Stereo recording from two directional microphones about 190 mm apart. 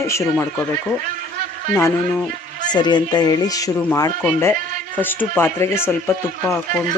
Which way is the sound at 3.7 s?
10° left (ahead or behind).